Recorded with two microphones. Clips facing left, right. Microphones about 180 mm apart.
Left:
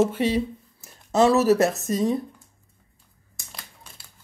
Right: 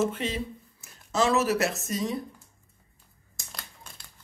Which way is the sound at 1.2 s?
40° left (ahead or behind).